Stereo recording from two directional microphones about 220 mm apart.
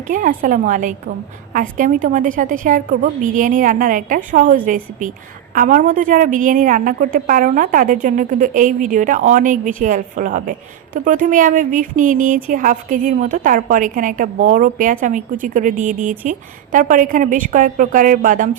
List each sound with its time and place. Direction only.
0.1 s a woman's voice: 40° right (ahead or behind)